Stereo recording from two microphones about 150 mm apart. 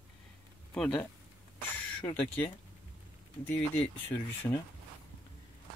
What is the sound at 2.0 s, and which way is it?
Speech, 15° left (ahead or behind).